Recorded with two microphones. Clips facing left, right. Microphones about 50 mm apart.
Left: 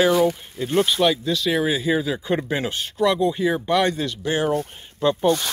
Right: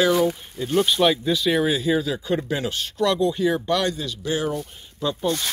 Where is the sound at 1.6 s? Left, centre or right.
Centre.